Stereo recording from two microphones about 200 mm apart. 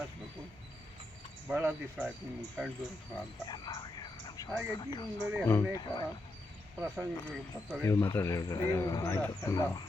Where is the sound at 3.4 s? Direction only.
20° left (ahead or behind).